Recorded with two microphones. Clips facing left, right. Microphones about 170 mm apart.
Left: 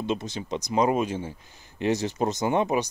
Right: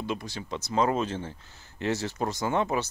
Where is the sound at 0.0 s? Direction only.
20° left (ahead or behind).